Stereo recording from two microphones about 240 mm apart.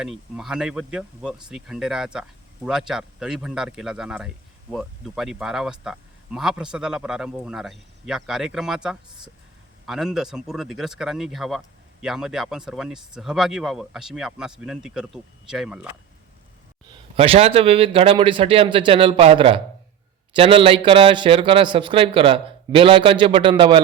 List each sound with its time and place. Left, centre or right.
0.0 s speech: centre
17.2 s speech: right